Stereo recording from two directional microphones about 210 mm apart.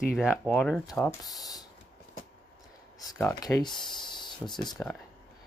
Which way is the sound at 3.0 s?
15° left (ahead or behind).